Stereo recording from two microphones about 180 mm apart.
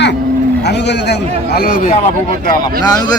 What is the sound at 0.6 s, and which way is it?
A man's voice, 70° left (ahead or behind).